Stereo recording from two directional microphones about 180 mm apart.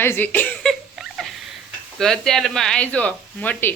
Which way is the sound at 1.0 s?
Centre (ahead or behind).